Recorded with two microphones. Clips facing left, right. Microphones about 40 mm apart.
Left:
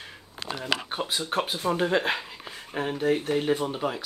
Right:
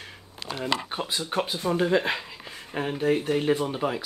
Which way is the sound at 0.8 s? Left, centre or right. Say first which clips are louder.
Left 1 dB; centre.